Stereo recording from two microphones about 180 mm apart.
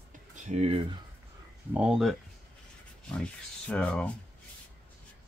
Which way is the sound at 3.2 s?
5° left (ahead or behind).